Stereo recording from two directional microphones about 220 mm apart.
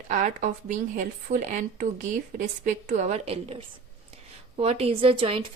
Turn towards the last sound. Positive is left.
turn(degrees=-25)  # may be behind; listen again after turning